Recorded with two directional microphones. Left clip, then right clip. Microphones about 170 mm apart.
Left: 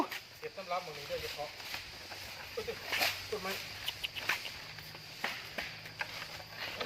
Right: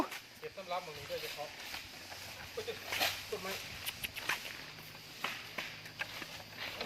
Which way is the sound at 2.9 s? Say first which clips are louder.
Left 2 dB; 5° left (ahead or behind).